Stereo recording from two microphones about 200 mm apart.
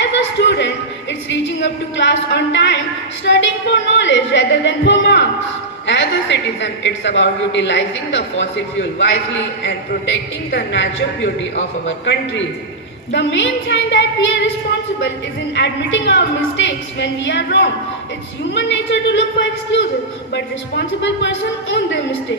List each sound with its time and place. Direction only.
0.0 s a sound: 65° left (ahead or behind)
1.3 s a woman's voice: 65° left (ahead or behind)
15.5 s a woman's voice: 65° left (ahead or behind)